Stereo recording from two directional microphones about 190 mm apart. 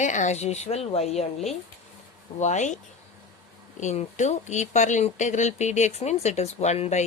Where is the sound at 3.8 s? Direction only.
40° left (ahead or behind).